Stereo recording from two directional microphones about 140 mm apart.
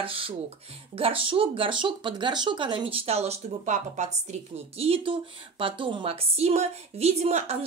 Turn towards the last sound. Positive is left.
turn(degrees=-50)  # may be behind; listen again after turning